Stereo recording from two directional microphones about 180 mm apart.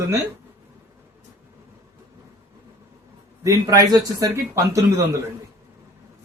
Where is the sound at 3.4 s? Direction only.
20° right (ahead or behind).